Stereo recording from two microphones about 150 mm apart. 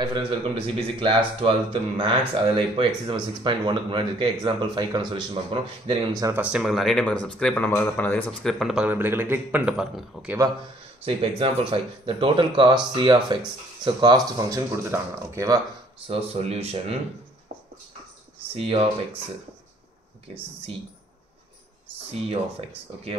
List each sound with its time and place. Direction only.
0.0 s speech: 35° right (ahead or behind)
6.2 s speech: 10° right (ahead or behind)
11.1 s speech: 40° right (ahead or behind); by 15.6 s 20° right (ahead or behind)
16.1 s speech: 40° right (ahead or behind)
18.5 s speech: 40° right (ahead or behind)